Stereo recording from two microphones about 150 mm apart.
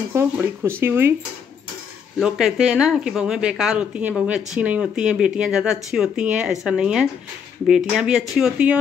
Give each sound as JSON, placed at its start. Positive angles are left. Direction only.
{"t": 0.1, "sound": "speech", "side_deg": -15}
{"t": 2.1, "sound": "speech", "side_deg": -5}